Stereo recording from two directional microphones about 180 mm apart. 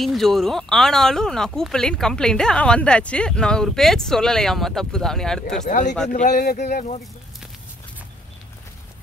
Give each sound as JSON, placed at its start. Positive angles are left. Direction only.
{"t": 0.0, "sound": "speech", "side_deg": 0}
{"t": 5.6, "sound": "speech", "side_deg": 45}